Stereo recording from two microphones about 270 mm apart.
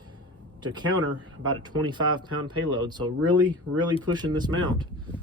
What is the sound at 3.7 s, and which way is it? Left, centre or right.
Speech, right.